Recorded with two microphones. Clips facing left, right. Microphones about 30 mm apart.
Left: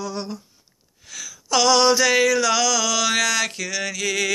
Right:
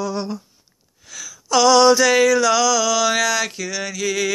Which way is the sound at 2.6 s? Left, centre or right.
Left.